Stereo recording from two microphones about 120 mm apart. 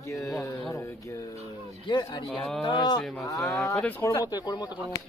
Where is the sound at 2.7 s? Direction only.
35° left (ahead or behind).